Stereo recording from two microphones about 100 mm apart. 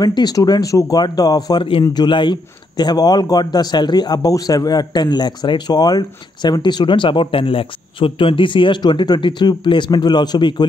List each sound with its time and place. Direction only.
0.0 s speech: 40° left (ahead or behind)
1.6 s a man's voice: 60° left (ahead or behind)